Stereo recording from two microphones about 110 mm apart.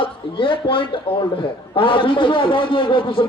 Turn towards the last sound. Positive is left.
turn(degrees=50)  # may be behind; listen again after turning